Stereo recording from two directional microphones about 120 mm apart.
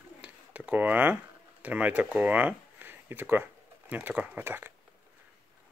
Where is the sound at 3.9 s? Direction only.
15° right (ahead or behind).